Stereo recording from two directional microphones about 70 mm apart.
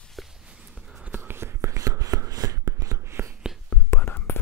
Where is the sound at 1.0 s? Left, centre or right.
Right.